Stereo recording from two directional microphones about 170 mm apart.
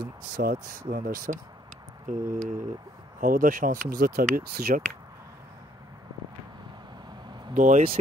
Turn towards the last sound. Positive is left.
turn(degrees=-45)  # may be behind; listen again after turning